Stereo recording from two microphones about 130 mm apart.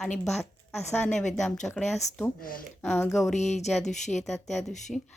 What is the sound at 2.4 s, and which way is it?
Speech, 90° left.